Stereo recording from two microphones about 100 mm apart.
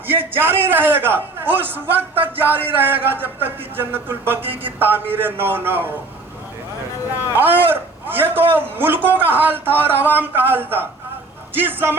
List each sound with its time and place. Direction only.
0.1 s a man's voice: 20° right (ahead or behind)
7.3 s a man's voice: 20° right (ahead or behind)